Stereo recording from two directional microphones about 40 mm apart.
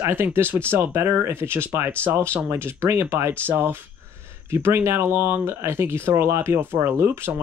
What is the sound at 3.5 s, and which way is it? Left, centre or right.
Speech, right.